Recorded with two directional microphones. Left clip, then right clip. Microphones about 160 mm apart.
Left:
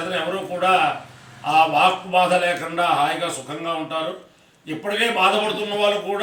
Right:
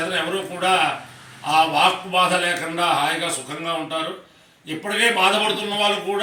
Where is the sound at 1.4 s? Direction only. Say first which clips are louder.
Left 1 dB; 15° left (ahead or behind).